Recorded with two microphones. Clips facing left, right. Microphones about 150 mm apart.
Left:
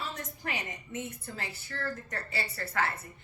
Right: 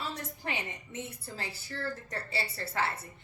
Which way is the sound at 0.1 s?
30° right (ahead or behind).